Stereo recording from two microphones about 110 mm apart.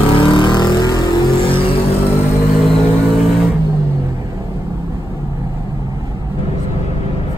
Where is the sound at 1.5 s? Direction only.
60° left (ahead or behind).